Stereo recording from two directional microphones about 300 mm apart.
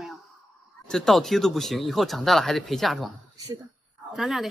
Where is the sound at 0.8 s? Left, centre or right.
Centre.